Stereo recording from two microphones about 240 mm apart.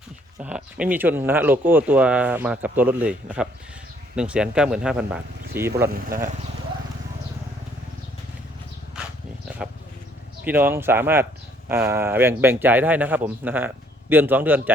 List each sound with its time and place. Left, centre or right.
0.3 s speech: centre
5.9 s speech: right
10.4 s speech: centre